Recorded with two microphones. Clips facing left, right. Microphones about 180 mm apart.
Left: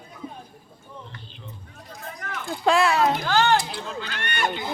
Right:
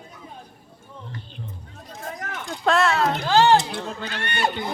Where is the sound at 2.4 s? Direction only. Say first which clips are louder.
Even; 5° left (ahead or behind).